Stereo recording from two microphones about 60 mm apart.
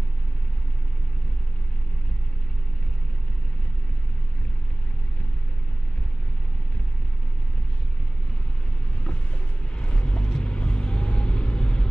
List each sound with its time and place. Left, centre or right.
9.0 s vehicle: centre